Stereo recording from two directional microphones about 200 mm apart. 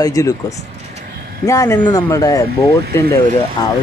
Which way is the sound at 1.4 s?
15° left (ahead or behind).